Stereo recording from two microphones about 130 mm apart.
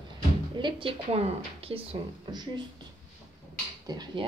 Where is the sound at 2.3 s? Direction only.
35° right (ahead or behind).